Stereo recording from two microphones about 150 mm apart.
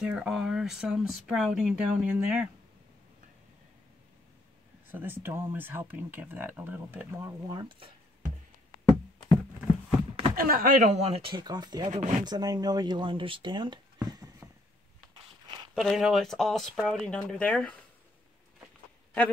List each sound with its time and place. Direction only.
0.0 s speech: 5° right (ahead or behind)
4.9 s speech: 15° right (ahead or behind)
10.3 s speech: 70° right (ahead or behind); by 11.9 s 30° right (ahead or behind)
11.9 s speech: 55° right (ahead or behind)
12.3 s speech: 25° right (ahead or behind)
15.7 s speech: centre (ahead or behind)
17.1 s speech: 5° left (ahead or behind)